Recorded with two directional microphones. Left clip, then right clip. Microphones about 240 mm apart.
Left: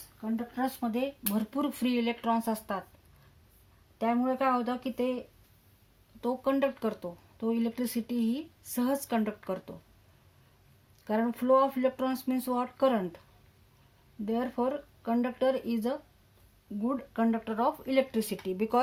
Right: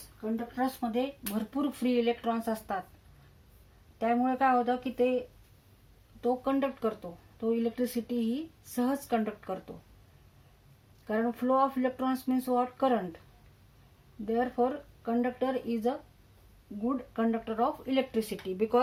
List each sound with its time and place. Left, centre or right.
0.2 s speech: left
3.9 s speech: left
6.2 s speech: left
11.0 s speech: left
14.3 s speech: left